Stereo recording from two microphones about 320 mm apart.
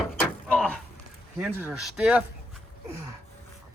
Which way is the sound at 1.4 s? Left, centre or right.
Centre.